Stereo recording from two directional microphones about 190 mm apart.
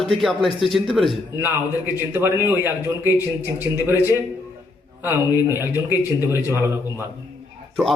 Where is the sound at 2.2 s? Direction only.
10° right (ahead or behind).